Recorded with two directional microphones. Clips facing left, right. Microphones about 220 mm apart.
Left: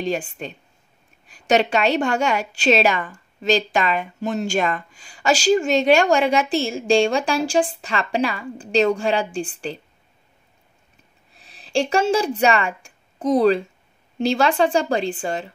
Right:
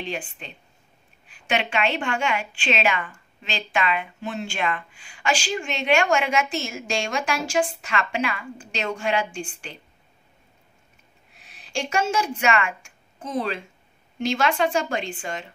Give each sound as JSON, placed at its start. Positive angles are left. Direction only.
{"t": 0.0, "sound": "a woman's voice", "side_deg": 40}
{"t": 11.3, "sound": "a woman's voice", "side_deg": 35}